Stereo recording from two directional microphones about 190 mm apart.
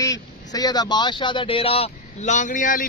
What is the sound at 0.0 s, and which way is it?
Speech, 20° left (ahead or behind).